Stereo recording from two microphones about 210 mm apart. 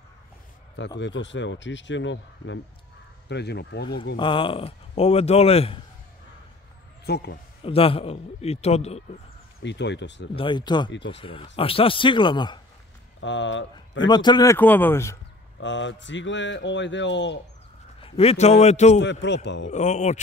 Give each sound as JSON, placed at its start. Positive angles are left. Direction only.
{"t": 0.7, "sound": "speech", "side_deg": 60}
{"t": 4.2, "sound": "speech", "side_deg": 25}
{"t": 7.1, "sound": "speech", "side_deg": 50}
{"t": 7.6, "sound": "speech", "side_deg": 25}
{"t": 9.6, "sound": "speech", "side_deg": 55}
{"t": 10.3, "sound": "speech", "side_deg": 25}
{"t": 13.2, "sound": "speech", "side_deg": 60}
{"t": 14.0, "sound": "speech", "side_deg": 20}
{"t": 15.6, "sound": "speech", "side_deg": 60}
{"t": 18.0, "sound": "a man's voice", "side_deg": 30}
{"t": 19.2, "sound": "speech", "side_deg": 55}
{"t": 19.7, "sound": "a man's voice", "side_deg": 35}